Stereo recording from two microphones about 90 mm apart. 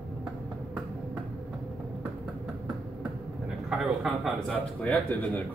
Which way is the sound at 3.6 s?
Centre (ahead or behind).